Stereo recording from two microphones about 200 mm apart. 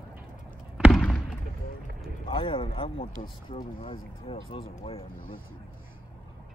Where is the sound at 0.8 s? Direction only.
Centre (ahead or behind).